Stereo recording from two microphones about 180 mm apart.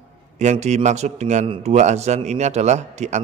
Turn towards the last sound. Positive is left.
turn(degrees=-40)  # may be behind; listen again after turning